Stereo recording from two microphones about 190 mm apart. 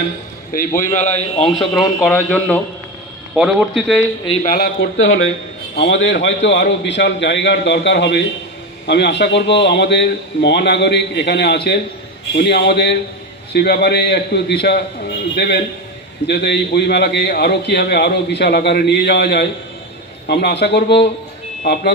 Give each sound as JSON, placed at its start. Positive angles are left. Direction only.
{"t": 0.7, "sound": "a man's voice", "side_deg": 40}
{"t": 1.7, "sound": "a man's voice", "side_deg": 0}
{"t": 4.5, "sound": "a man's voice", "side_deg": 60}
{"t": 5.8, "sound": "a man's voice", "side_deg": 70}